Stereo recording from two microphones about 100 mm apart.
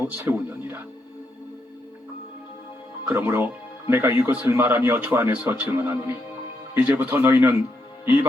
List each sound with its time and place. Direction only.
0.0 s speech: 20° right (ahead or behind)
3.1 s speech: 20° right (ahead or behind)